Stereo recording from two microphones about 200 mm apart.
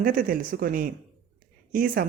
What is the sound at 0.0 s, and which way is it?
Speech, 45° right (ahead or behind).